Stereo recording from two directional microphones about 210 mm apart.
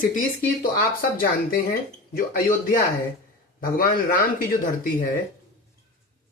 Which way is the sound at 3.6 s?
40° left (ahead or behind).